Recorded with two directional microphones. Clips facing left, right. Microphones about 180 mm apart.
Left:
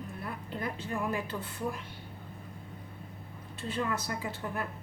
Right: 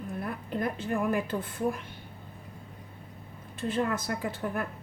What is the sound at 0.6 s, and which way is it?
A woman's voice, 50° right (ahead or behind).